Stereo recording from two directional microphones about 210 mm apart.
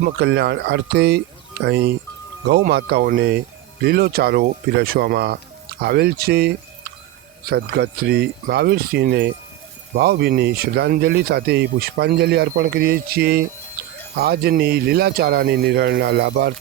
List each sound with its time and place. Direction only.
0.0 s speech: 55° right (ahead or behind)